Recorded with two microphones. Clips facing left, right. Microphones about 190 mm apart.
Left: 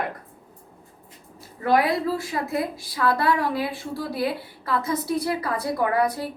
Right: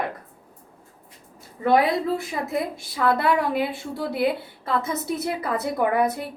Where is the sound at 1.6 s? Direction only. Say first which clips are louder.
Right 1 dB; 25° right (ahead or behind).